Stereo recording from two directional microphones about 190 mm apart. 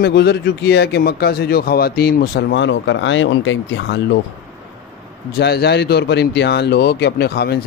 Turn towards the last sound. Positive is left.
turn(degrees=60)  # may be behind; listen again after turning